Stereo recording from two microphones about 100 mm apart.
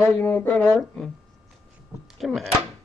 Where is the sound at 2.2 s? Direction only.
5° left (ahead or behind).